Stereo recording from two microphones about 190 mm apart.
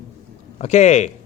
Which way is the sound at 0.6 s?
35° left (ahead or behind).